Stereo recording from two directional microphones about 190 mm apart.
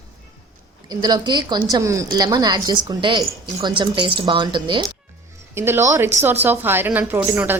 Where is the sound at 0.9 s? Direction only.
20° right (ahead or behind).